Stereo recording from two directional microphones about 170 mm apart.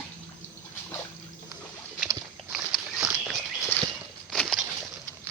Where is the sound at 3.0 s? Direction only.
Centre (ahead or behind).